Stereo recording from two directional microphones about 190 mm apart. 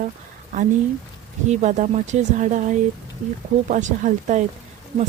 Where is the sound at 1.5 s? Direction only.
40° right (ahead or behind).